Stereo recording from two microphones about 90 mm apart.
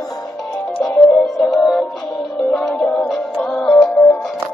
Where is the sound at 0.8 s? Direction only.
15° left (ahead or behind).